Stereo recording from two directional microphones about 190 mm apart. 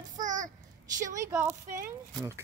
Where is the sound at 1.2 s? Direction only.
15° right (ahead or behind).